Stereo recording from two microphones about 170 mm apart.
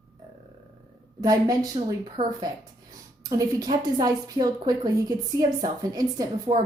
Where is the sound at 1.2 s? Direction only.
20° right (ahead or behind).